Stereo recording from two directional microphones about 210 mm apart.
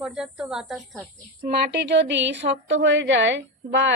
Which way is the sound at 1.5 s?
50° right (ahead or behind).